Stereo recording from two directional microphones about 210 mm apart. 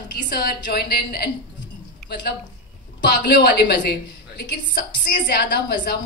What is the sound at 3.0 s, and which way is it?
Speech, 50° left (ahead or behind).